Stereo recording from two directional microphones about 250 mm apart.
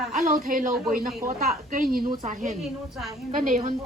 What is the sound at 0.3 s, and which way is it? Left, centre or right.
A woman's voice, right.